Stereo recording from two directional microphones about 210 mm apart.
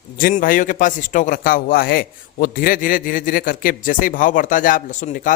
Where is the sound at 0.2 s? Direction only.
40° left (ahead or behind).